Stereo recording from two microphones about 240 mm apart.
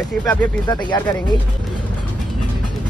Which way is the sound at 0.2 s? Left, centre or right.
Centre.